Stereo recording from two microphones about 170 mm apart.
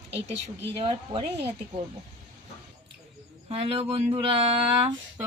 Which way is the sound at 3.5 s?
35° right (ahead or behind).